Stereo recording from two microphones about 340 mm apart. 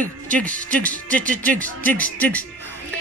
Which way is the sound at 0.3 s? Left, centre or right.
Centre.